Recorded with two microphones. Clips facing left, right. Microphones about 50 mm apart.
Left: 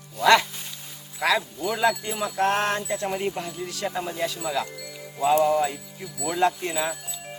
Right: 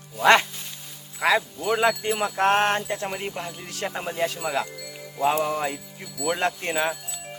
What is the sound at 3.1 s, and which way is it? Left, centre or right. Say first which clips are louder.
Speech: left 3 dB; centre.